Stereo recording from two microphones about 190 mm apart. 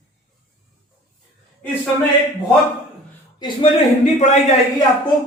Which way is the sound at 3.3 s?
25° left (ahead or behind).